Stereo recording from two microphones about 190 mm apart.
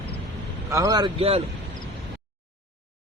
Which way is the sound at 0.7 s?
15° right (ahead or behind).